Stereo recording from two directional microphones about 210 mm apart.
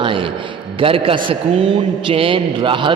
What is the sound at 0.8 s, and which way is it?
A man's voice, 25° right (ahead or behind).